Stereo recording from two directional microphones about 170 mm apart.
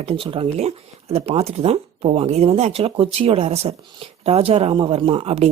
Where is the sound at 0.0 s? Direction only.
35° right (ahead or behind).